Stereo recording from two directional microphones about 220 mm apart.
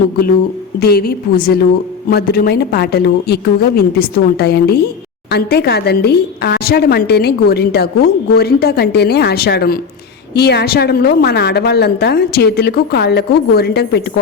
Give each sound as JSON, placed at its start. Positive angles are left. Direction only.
{"t": 0.8, "sound": "a woman's voice", "side_deg": 45}